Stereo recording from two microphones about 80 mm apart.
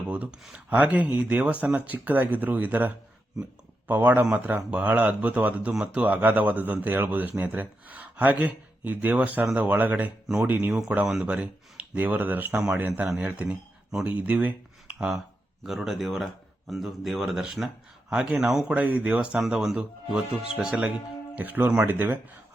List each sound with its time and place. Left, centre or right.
0.1 s speech: centre
10.7 s speech: centre; by 12.5 s right
12.5 s speech: centre
14.9 s speech: centre
18.7 s speech: centre
21.3 s speech: right